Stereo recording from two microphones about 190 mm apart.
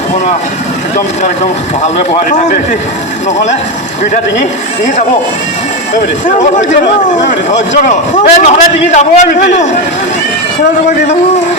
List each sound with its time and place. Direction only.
2.0 s a man's voice: 40° left (ahead or behind)
6.2 s a man's voice: 40° left (ahead or behind)
7.9 s a man's voice: 40° left (ahead or behind)